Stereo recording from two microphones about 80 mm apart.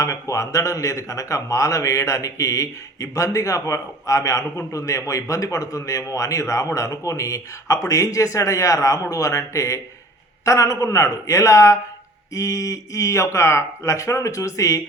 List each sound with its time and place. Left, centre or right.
0.0 s speech: left